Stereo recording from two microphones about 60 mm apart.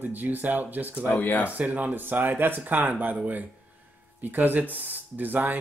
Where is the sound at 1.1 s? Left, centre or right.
Left.